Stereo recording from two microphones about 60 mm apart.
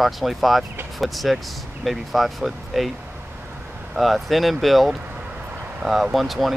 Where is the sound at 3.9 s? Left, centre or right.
Centre.